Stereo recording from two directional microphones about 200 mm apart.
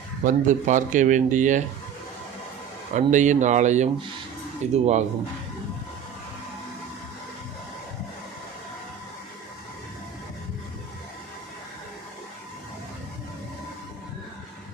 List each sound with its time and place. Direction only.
0.3 s speech: 40° right (ahead or behind)
2.9 s speech: 40° right (ahead or behind)